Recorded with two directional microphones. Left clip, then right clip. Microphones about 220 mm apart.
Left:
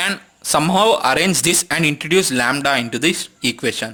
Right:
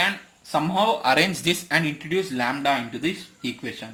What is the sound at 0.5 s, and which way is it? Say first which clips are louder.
Speech: left 7 dB; 45° left (ahead or behind).